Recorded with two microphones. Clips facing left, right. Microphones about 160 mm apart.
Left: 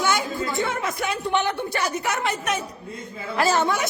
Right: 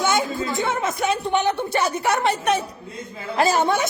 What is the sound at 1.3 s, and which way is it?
A woman's voice, 20° right (ahead or behind).